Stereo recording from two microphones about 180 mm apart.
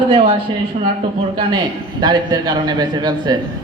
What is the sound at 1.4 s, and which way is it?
A man's voice, 25° right (ahead or behind).